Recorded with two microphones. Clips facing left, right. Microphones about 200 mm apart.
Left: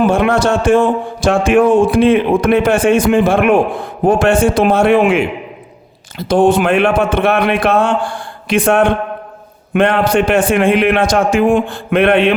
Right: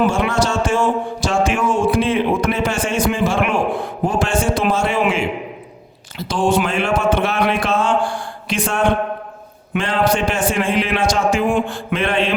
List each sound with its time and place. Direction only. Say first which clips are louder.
0.0 s speech: left 5 dB; 60° left (ahead or behind)